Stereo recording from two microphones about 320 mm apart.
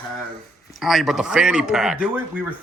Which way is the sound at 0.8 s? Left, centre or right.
Centre.